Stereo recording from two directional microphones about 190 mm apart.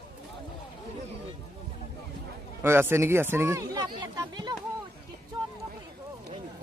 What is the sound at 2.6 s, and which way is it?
Speech, 10° right (ahead or behind).